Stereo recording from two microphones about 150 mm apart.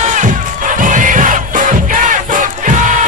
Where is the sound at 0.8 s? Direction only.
60° right (ahead or behind).